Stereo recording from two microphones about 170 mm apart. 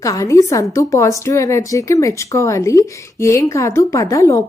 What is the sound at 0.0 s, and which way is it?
A woman's voice, 20° left (ahead or behind).